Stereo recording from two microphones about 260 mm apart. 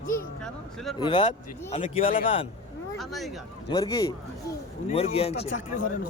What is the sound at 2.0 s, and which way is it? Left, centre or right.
Speech, left.